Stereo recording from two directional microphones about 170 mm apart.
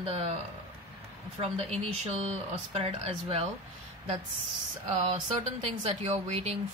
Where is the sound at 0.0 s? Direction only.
35° right (ahead or behind).